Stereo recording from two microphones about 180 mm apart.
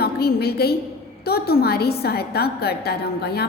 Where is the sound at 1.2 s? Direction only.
60° left (ahead or behind).